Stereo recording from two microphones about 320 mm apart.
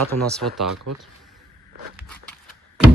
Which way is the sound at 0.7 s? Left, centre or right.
Right.